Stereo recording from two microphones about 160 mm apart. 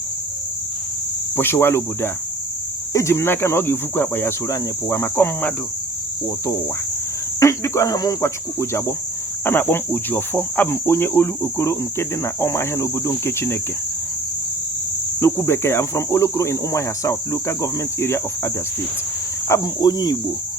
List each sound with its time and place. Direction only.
1.4 s cricket: 15° left (ahead or behind)
15.2 s cricket: 15° left (ahead or behind)